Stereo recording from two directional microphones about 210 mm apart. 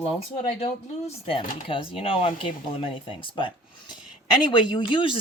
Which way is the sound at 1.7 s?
25° left (ahead or behind).